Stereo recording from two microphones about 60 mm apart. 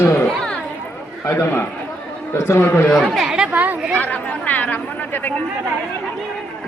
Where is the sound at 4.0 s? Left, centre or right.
Left.